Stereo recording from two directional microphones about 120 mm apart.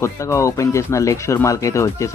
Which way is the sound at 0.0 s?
25° left (ahead or behind).